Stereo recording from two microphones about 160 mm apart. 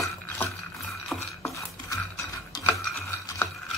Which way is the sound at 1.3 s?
20° left (ahead or behind).